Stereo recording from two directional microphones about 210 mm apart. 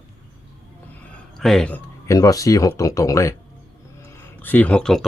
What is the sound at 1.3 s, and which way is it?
Speech, centre (ahead or behind).